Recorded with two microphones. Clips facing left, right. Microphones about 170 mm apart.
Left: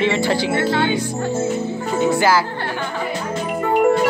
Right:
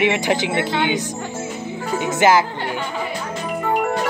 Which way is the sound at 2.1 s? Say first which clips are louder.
Right 3 dB; 20° right (ahead or behind).